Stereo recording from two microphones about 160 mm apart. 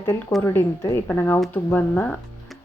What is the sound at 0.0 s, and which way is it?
A woman's voice, 20° left (ahead or behind).